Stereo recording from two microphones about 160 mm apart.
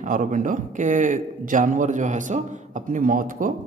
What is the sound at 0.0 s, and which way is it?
A man's voice, 55° right (ahead or behind).